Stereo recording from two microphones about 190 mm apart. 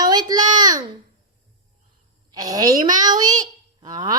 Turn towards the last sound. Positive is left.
turn(degrees=-20)  # may be behind; listen again after turning